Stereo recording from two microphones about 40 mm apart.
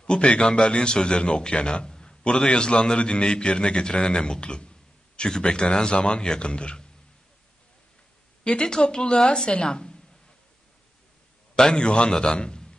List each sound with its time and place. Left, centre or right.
0.0 s a man's voice: left
8.5 s a man's voice: left
11.5 s a man's voice: left